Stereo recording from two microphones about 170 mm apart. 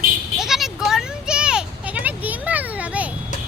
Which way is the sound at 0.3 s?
Centre (ahead or behind).